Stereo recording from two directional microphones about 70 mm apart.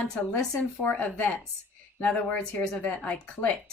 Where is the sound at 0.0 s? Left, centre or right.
Centre.